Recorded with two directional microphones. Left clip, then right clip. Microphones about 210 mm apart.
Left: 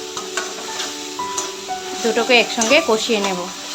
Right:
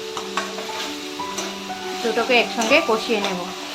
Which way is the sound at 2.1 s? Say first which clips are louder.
Left 3 dB; 20° left (ahead or behind).